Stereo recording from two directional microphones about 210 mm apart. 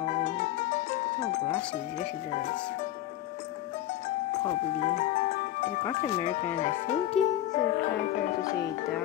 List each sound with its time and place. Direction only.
0.0 s music: 35° left (ahead or behind)
4.7 s speech: 35° left (ahead or behind)
5.9 s speech: 25° left (ahead or behind)
7.2 s music: centre (ahead or behind)
7.5 s speech: 35° left (ahead or behind)